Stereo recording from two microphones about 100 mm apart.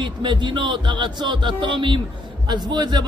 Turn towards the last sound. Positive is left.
turn(degrees=-45)  # may be behind; listen again after turning